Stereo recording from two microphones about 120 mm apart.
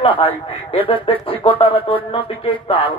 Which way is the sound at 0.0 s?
50° left (ahead or behind).